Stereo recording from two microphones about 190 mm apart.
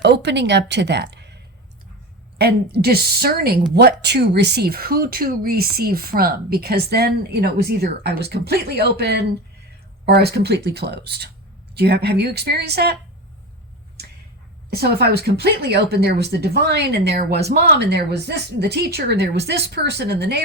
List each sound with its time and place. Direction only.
0.0 s speech: 65° right (ahead or behind)
2.4 s speech: 55° right (ahead or behind)
14.7 s speech: 55° right (ahead or behind)